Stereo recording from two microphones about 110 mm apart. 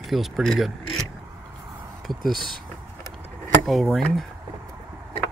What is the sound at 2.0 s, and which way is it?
Speech, centre (ahead or behind).